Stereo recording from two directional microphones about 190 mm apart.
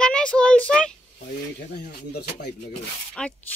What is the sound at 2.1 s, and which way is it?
Speech, 60° left (ahead or behind).